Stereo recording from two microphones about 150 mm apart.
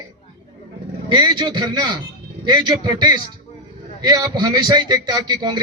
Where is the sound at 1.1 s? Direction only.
30° right (ahead or behind).